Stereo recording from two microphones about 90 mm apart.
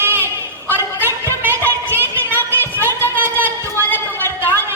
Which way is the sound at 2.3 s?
25° left (ahead or behind).